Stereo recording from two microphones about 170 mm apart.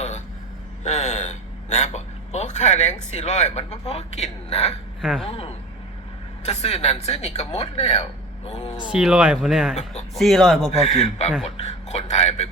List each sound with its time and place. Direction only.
0.9 s a man's voice: 40° left (ahead or behind)
4.9 s speech: centre (ahead or behind)
5.3 s a woman's voice: 35° left (ahead or behind)
8.8 s speech: 5° right (ahead or behind)
9.7 s a woman's voice: 40° left (ahead or behind)
10.2 s speech: centre (ahead or behind)
10.7 s a woman's voice: 40° left (ahead or behind)